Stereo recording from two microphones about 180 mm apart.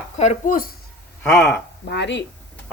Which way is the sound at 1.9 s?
75° left (ahead or behind).